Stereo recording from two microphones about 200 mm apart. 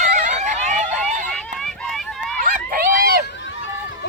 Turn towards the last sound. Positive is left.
turn(degrees=-50)  # may be behind; listen again after turning